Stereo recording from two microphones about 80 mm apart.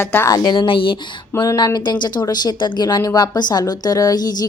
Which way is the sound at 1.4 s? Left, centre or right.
Left.